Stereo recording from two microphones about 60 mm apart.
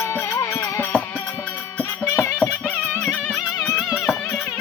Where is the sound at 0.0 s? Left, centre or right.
Left.